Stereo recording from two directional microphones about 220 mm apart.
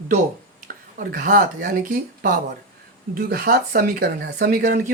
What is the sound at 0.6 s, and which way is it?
Speech, 40° right (ahead or behind).